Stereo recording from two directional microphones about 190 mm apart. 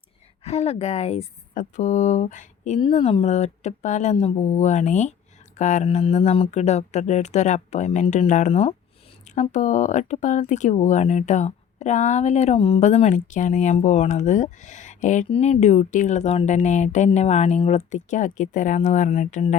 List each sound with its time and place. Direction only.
0.4 s speech: 35° left (ahead or behind)